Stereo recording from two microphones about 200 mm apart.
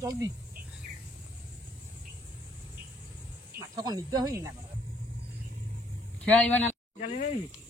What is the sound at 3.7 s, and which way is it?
Speech, 20° right (ahead or behind).